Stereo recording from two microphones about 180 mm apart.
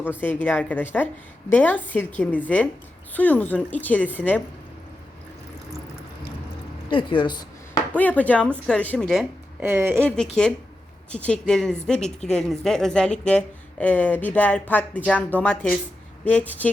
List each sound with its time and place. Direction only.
0.0 s speech: 10° left (ahead or behind)
6.9 s speech: 25° left (ahead or behind)
7.9 s a woman's voice: 10° left (ahead or behind); by 10.0 s 10° right (ahead or behind)
10.0 s a woman's voice: 5° left (ahead or behind)